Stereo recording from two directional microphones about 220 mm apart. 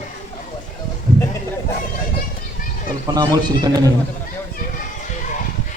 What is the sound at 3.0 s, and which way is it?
Speech, 15° right (ahead or behind).